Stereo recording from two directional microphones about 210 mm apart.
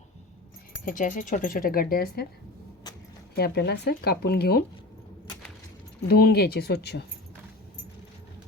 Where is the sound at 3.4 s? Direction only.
50° left (ahead or behind).